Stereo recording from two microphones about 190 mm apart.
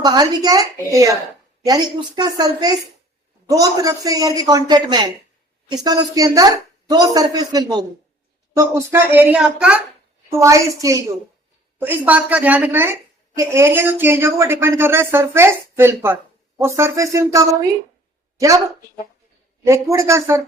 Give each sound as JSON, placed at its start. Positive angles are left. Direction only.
{"t": 0.0, "sound": "speech", "side_deg": -20}
{"t": 8.5, "sound": "a woman's voice", "side_deg": -10}
{"t": 10.3, "sound": "a woman's voice", "side_deg": -15}
{"t": 19.6, "sound": "a woman's voice", "side_deg": -15}